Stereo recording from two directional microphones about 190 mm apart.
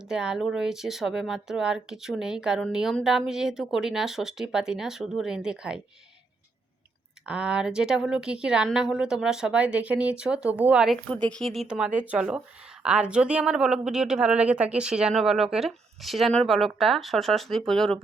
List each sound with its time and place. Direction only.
0.0 s speech: 5° right (ahead or behind)
7.3 s speech: 5° right (ahead or behind)